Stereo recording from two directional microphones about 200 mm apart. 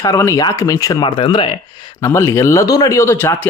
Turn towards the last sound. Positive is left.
turn(degrees=10)  # may be behind; listen again after turning